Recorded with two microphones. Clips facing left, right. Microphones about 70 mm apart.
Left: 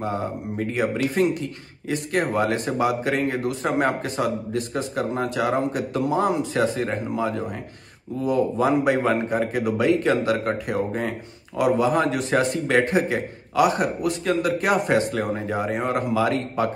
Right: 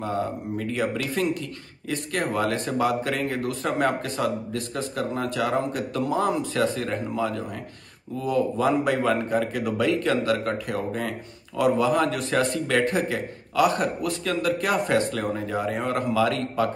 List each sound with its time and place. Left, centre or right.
0.6 s speech: left